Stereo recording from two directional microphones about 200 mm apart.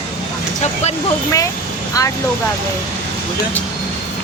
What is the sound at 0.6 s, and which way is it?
Speech, 35° left (ahead or behind).